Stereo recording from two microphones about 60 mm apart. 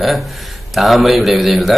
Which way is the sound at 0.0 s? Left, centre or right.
Centre.